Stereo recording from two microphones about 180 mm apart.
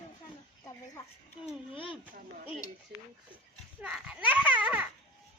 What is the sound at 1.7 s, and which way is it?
Speech, 30° left (ahead or behind).